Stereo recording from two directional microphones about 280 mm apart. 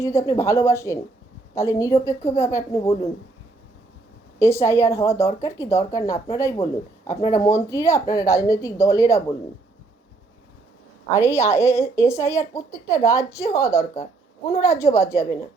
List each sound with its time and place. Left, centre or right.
0.0 s speech: centre
4.4 s speech: centre
11.1 s speech: centre